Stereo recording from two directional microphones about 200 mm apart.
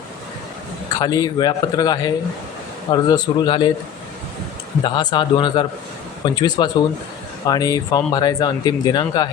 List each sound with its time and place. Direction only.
1.0 s speech: 20° left (ahead or behind)
4.8 s speech: 20° left (ahead or behind)